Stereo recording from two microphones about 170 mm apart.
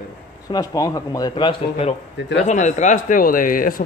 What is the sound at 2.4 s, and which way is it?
Speech, 45° left (ahead or behind).